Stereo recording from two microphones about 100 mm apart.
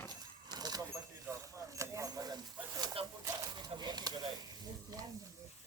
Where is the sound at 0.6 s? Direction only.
40° right (ahead or behind).